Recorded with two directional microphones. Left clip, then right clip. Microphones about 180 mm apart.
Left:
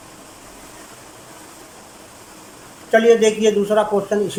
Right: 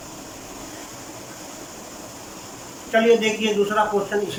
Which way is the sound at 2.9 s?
35° left (ahead or behind).